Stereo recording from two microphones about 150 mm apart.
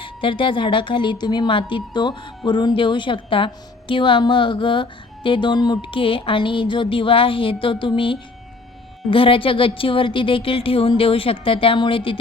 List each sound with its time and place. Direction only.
0.0 s speech: 35° left (ahead or behind)